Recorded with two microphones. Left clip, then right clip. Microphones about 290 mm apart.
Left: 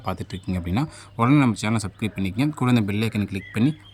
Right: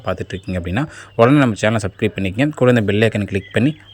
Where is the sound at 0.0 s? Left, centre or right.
Centre.